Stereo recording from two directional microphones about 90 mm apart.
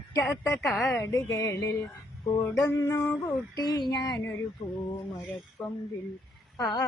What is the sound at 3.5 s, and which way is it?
Child singing, 50° left (ahead or behind).